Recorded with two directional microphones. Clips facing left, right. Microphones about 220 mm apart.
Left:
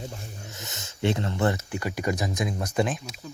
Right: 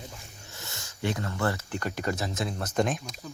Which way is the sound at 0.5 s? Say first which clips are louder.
Left 3 dB; 20° left (ahead or behind).